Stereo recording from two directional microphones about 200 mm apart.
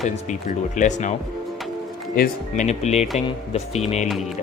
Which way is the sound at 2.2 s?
35° left (ahead or behind).